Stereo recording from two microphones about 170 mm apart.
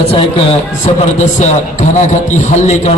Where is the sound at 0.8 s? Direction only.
45° left (ahead or behind).